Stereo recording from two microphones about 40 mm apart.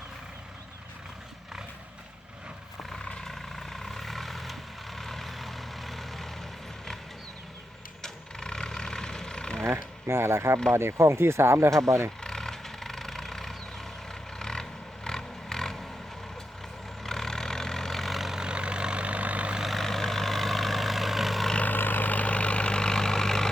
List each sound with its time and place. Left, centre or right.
3.2 s vehicle: centre
8.0 s vehicle: centre
9.7 s speech: right
12.2 s vehicle: centre
17.0 s vehicle: centre
18.3 s vehicle: right
19.6 s vehicle: centre
21.6 s vehicle: left; by 23.5 s centre